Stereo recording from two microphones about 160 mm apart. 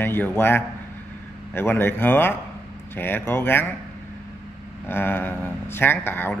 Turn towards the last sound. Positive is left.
turn(degrees=15)  # may be behind; listen again after turning